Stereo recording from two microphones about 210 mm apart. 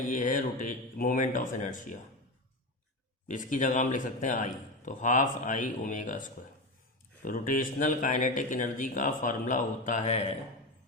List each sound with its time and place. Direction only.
0.0 s a man's voice: 40° left (ahead or behind)
3.2 s a man's voice: 40° left (ahead or behind)